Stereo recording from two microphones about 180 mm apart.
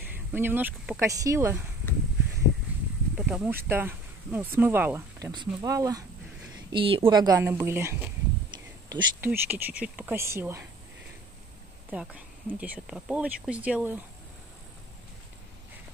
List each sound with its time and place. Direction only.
0.0 s speech: 10° right (ahead or behind)
2.7 s a sound: 10° right (ahead or behind)
3.2 s speech: 5° right (ahead or behind)
5.3 s a woman's voice: 25° right (ahead or behind)
6.7 s a woman's voice: 30° right (ahead or behind)
11.9 s speech: 5° right (ahead or behind)